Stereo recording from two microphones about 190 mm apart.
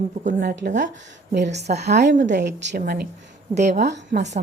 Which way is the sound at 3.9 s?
60° right (ahead or behind).